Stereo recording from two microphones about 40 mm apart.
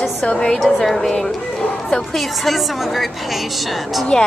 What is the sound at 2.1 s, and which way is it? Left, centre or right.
Speech, centre.